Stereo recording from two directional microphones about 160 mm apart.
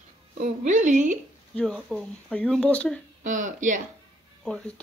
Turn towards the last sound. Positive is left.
turn(degrees=5)  # may be behind; listen again after turning